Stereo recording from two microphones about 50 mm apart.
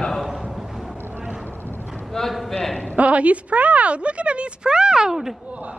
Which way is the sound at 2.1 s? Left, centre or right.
Centre.